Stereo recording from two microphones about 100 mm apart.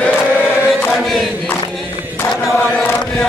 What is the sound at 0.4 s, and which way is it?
Chant, 15° right (ahead or behind).